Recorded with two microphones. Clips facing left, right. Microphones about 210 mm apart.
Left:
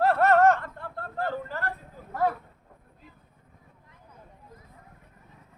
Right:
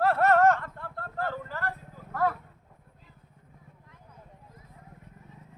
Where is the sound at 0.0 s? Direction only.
20° left (ahead or behind).